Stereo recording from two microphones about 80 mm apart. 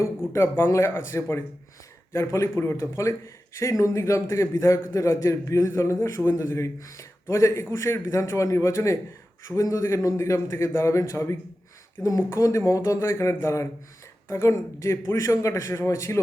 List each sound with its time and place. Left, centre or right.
0.3 s a man's voice: left